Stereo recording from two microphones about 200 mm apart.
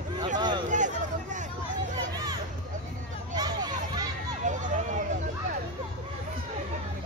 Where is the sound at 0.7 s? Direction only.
40° right (ahead or behind).